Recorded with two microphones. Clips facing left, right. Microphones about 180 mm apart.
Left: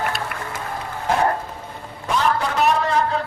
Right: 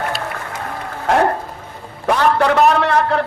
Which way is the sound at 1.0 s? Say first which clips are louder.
Right 4 dB; 70° right (ahead or behind).